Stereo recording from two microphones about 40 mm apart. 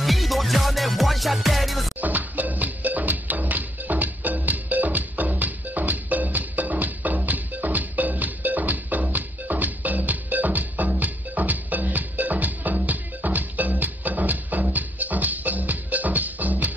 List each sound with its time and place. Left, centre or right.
0.0 s music: centre
2.0 s music: right